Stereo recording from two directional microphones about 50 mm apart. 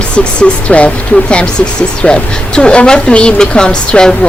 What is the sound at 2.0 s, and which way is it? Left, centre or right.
Speech, centre.